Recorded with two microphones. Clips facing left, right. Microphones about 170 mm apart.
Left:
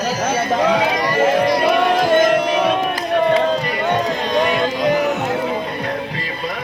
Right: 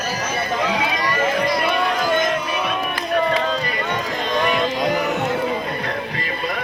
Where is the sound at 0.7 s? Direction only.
35° left (ahead or behind).